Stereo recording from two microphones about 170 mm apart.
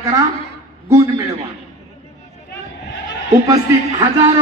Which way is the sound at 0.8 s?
20° right (ahead or behind).